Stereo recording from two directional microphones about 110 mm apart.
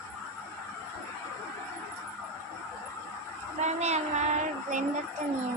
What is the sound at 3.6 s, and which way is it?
Child singing, 90° right.